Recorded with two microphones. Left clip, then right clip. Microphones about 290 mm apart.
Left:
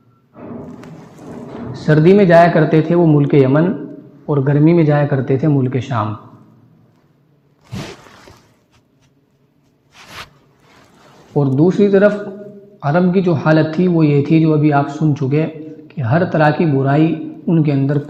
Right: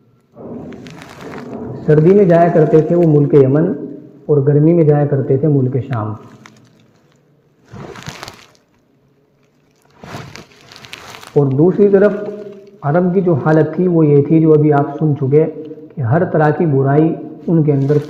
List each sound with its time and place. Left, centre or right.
1.9 s speech: left
11.3 s speech: left